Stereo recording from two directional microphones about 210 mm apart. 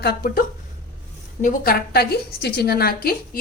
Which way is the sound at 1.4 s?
45° left (ahead or behind).